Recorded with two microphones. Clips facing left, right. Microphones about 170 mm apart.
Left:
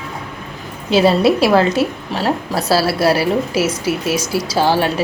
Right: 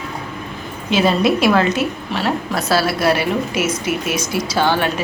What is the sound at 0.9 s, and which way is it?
A woman's voice, 35° left (ahead or behind).